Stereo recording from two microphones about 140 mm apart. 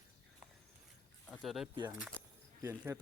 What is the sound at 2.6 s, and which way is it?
Speech, 15° right (ahead or behind).